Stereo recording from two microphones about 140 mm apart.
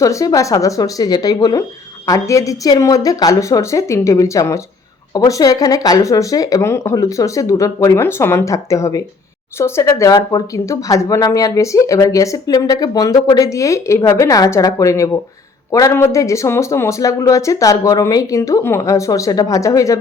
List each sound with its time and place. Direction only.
0.0 s speech: 25° left (ahead or behind)